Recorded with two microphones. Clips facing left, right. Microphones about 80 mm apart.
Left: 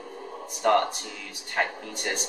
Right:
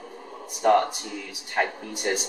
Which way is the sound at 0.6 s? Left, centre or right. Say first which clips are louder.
Right 2 dB; centre.